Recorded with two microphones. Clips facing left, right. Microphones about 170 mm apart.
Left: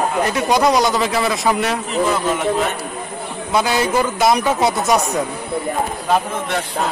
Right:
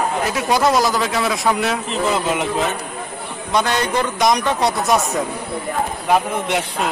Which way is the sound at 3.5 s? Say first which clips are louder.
Left 2 dB; 5° left (ahead or behind).